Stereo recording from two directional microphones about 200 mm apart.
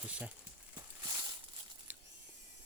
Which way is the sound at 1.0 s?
15° right (ahead or behind).